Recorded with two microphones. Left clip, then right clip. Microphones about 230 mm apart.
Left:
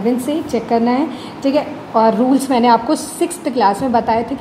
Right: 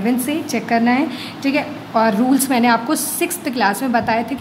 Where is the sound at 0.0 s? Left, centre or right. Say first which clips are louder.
Left 2 dB; centre.